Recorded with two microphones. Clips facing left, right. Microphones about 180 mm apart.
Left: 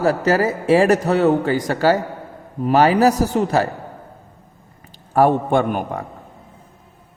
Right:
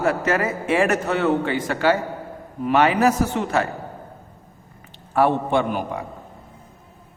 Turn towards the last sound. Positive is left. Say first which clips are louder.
# left 3 dB
turn(degrees=50)  # may be behind; listen again after turning